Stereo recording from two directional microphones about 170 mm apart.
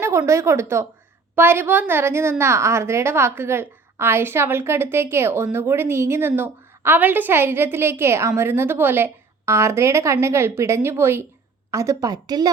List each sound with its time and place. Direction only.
0.0 s a woman's voice: 15° right (ahead or behind)